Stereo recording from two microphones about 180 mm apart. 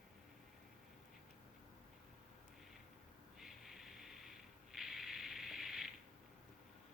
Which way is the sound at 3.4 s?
Centre (ahead or behind).